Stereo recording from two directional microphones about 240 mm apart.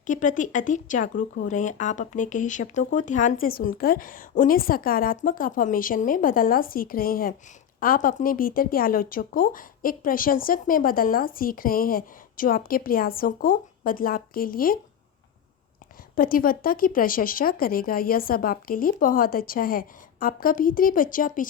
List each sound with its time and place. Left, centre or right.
0.0 s speech: left
16.1 s speech: left